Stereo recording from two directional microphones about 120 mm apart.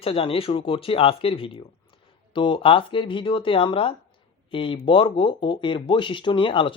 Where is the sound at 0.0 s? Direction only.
50° left (ahead or behind).